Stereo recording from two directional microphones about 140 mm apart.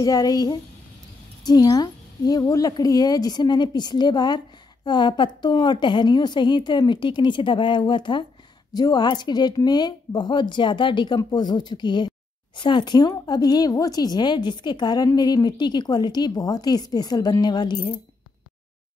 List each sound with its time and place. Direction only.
0.0 s a woman's voice: 25° left (ahead or behind)